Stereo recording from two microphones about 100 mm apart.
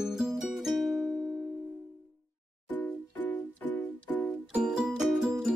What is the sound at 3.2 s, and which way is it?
Music, 15° left (ahead or behind).